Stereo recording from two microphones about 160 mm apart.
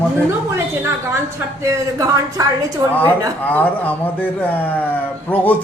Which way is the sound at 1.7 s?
20° right (ahead or behind).